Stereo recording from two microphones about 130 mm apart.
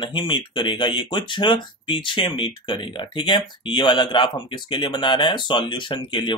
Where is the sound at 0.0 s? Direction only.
35° left (ahead or behind).